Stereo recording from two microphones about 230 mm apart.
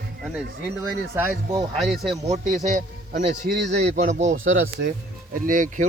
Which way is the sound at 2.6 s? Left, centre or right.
Right.